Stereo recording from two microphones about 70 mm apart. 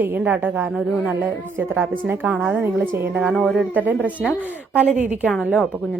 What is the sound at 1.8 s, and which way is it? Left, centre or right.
A woman's voice, right.